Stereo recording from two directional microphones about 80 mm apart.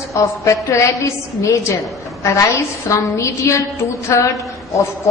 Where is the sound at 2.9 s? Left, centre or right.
Left.